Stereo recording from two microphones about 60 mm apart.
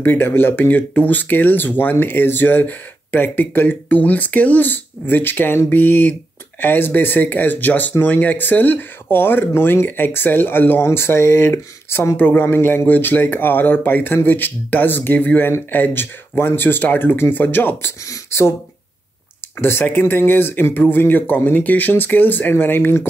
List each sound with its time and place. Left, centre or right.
0.0 s speech: left
12.2 s speech: left
18.0 s speech: left
19.6 s speech: left